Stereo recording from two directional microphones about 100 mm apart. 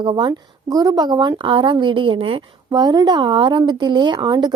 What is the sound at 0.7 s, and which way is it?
A woman's voice, 40° right (ahead or behind).